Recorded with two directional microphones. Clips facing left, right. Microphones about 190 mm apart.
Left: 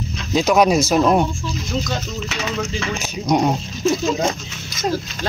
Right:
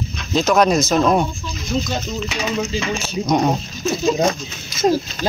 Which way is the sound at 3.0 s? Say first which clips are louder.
Left 1 dB; 10° left (ahead or behind).